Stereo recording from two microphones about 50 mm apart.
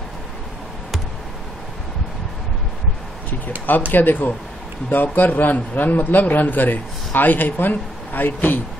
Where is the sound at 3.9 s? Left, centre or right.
Left.